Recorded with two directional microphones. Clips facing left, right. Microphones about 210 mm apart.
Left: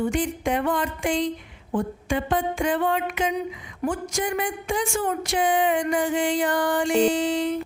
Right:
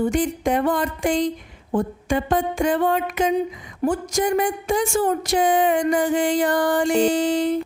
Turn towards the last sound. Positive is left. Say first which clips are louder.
# right 3 dB
turn(degrees=-40)  # may be behind; listen again after turning